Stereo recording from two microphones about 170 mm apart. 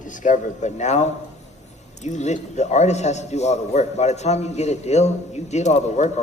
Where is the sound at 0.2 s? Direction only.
45° left (ahead or behind).